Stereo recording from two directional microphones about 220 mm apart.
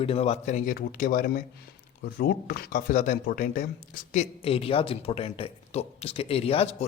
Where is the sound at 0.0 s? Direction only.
25° left (ahead or behind).